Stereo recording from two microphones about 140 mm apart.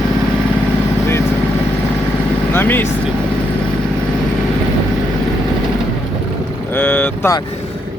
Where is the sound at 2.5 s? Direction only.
15° left (ahead or behind).